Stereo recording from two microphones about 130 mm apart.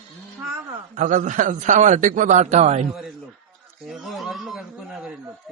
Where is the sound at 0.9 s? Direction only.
70° right (ahead or behind).